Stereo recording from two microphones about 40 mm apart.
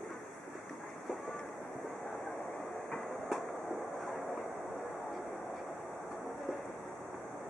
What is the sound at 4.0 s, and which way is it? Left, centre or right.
Vehicle, centre.